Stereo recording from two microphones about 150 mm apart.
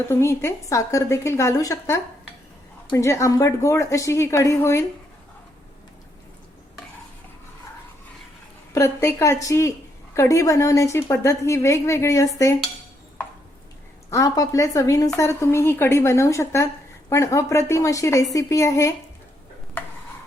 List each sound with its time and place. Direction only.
0.1 s a woman's voice: 15° left (ahead or behind)
8.7 s a woman's voice: 20° left (ahead or behind)
14.1 s a woman's voice: 20° left (ahead or behind)